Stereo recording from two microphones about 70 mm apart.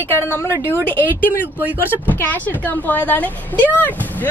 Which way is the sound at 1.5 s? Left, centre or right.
Right.